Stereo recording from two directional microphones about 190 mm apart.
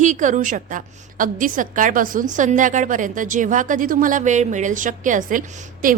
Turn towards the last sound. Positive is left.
turn(degrees=-45)  # may be behind; listen again after turning